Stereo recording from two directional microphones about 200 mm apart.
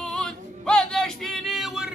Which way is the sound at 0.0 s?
5° left (ahead or behind).